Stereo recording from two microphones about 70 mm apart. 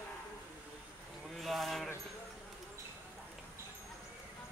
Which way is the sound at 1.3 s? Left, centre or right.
Centre.